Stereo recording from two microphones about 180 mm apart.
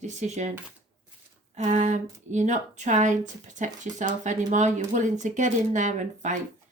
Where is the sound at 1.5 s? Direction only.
40° right (ahead or behind).